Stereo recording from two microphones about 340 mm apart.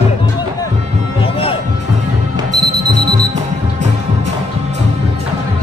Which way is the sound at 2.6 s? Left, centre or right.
Right.